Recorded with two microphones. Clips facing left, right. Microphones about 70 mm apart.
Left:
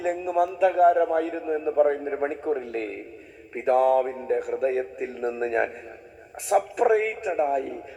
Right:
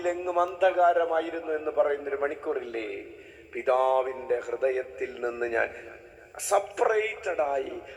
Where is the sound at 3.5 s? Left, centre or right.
Right.